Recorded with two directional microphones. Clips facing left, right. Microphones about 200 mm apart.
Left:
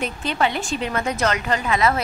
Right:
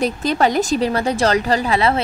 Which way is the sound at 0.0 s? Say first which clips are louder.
Right 6 dB; 40° right (ahead or behind).